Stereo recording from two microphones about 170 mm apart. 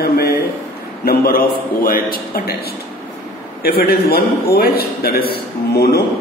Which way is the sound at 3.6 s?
65° left (ahead or behind).